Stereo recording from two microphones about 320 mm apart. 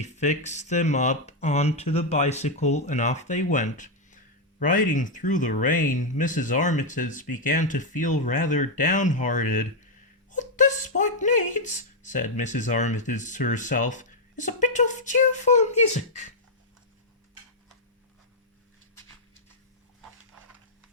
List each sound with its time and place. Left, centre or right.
0.0 s speech: left